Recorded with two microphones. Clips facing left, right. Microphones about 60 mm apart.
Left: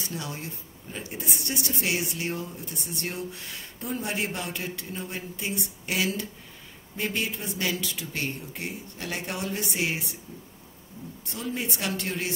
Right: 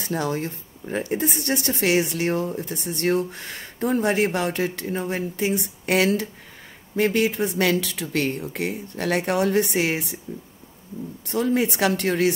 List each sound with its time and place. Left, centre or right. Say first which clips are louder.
0.0 s speech: right 10 dB; right
11.2 s speech: right 11 dB; right